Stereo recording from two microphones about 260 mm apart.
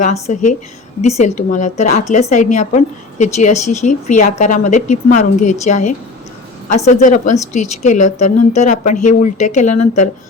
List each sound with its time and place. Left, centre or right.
0.0 s a woman's voice: left